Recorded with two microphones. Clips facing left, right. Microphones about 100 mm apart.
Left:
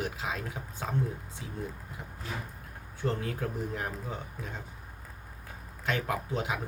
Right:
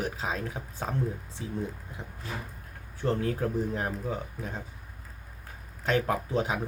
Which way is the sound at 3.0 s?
35° right (ahead or behind).